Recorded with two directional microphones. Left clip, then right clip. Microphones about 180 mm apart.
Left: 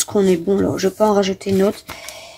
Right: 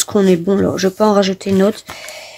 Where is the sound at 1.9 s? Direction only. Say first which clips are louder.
Right 3 dB; 45° right (ahead or behind).